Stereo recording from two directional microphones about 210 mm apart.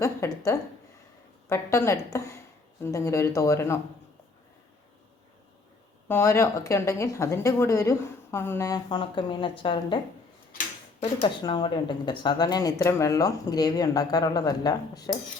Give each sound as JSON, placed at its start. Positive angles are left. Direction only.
{"t": 0.0, "sound": "a woman's voice", "side_deg": 15}
{"t": 6.1, "sound": "a woman's voice", "side_deg": 10}
{"t": 11.4, "sound": "a woman's voice", "side_deg": 20}